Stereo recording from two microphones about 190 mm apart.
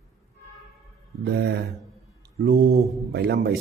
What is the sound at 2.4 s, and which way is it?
A man's voice, 60° right (ahead or behind).